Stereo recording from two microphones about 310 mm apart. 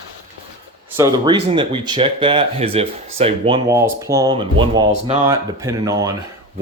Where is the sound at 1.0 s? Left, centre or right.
Centre.